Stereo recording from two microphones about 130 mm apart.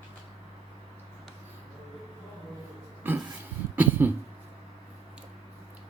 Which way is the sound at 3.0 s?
15° right (ahead or behind).